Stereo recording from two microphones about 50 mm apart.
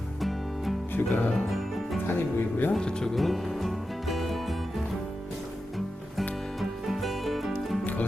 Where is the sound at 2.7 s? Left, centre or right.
Centre.